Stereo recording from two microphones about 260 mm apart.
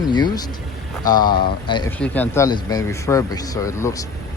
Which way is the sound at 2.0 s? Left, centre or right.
Centre.